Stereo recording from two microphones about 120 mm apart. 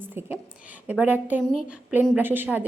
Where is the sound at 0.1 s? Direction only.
15° right (ahead or behind).